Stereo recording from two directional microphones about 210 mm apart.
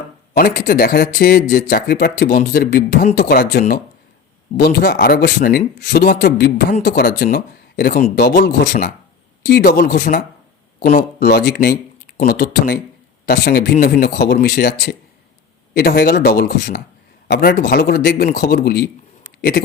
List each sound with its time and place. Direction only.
0.3 s speech: 45° left (ahead or behind)